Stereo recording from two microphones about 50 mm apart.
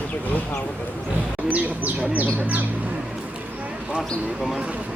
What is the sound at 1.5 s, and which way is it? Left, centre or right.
Bird, right.